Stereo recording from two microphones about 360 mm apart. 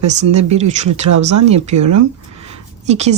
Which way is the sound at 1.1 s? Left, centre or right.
Right.